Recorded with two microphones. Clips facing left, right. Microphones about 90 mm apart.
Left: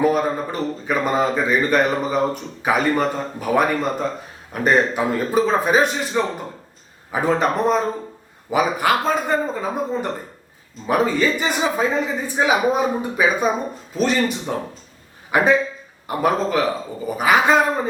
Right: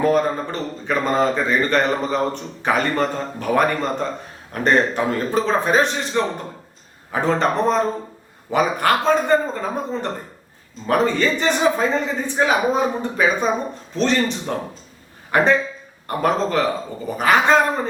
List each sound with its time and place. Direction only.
0.0 s a man's voice: 5° left (ahead or behind)